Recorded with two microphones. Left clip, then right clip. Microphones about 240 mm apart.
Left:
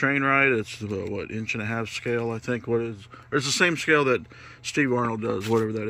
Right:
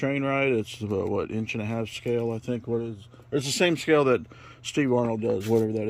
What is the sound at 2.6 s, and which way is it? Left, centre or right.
Speech, left.